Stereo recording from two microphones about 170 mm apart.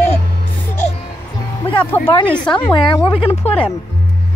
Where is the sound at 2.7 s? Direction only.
30° left (ahead or behind).